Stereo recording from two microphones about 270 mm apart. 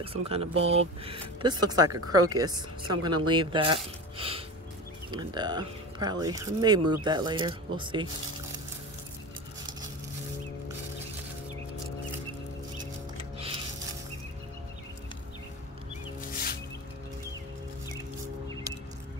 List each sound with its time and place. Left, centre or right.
0.0 s speech: right